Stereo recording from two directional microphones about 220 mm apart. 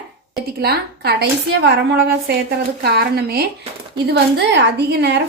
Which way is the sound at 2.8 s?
45° right (ahead or behind).